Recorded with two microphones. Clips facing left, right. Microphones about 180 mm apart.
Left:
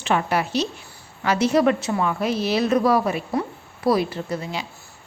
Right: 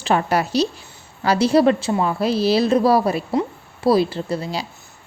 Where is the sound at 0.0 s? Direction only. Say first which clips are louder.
Right 3 dB; 40° right (ahead or behind).